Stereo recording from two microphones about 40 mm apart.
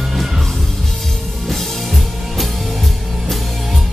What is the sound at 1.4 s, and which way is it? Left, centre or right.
Music, centre.